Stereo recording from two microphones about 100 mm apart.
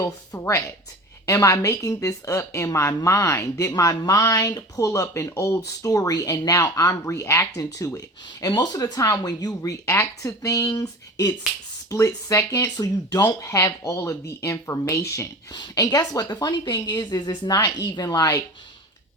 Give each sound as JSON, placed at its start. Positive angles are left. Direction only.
{"t": 0.0, "sound": "speech", "side_deg": 30}